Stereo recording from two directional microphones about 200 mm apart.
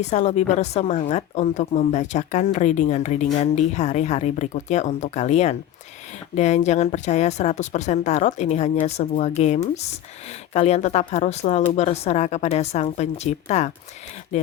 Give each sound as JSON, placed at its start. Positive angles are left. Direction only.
{"t": 0.0, "sound": "a woman's voice", "side_deg": 35}